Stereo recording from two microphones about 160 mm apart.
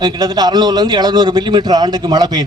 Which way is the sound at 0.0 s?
25° right (ahead or behind).